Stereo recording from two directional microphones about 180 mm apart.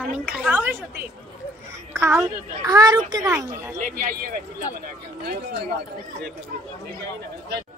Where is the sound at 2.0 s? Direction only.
10° right (ahead or behind).